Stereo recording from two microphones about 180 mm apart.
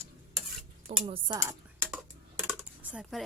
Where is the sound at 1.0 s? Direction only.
25° right (ahead or behind).